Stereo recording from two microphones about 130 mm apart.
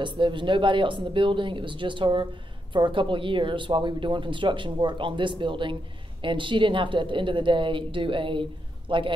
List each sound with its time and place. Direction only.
0.0 s speech: 40° right (ahead or behind)